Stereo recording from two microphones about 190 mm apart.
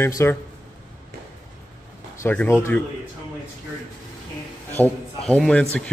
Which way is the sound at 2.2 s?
10° left (ahead or behind).